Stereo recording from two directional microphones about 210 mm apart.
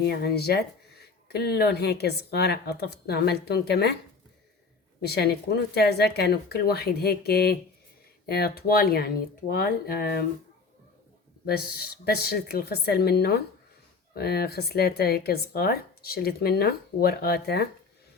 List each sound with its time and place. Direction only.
0.0 s speech: 50° left (ahead or behind)
4.9 s speech: 50° left (ahead or behind)
11.4 s speech: 50° left (ahead or behind)